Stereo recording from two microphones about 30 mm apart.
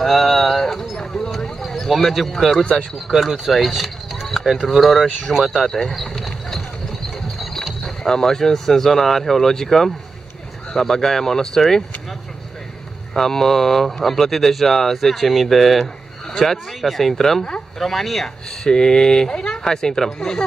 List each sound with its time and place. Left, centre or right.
0.0 s a sound: centre
1.6 s a sound: centre
3.1 s speech: centre
5.7 s speech: centre
5.9 s speech: centre
7.8 s speech: centre
13.1 s speech: centre
18.6 s speech: centre